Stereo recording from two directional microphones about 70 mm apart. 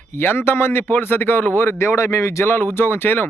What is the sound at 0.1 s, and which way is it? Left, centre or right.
Speech, left.